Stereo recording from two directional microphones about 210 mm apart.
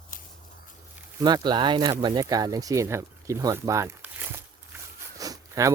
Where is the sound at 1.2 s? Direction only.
20° right (ahead or behind).